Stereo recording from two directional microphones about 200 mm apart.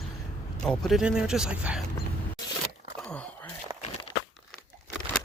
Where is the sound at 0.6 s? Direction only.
Centre (ahead or behind).